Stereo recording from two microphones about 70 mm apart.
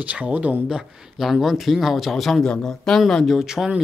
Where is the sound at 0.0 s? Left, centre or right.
Centre.